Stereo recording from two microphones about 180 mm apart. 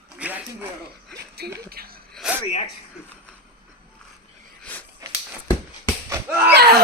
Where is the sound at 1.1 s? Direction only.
60° right (ahead or behind).